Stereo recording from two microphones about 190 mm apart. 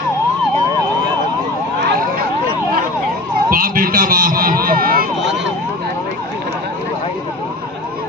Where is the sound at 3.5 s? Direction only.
50° right (ahead or behind).